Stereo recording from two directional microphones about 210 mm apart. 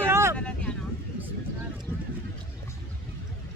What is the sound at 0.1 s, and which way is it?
Vehicle, 15° right (ahead or behind).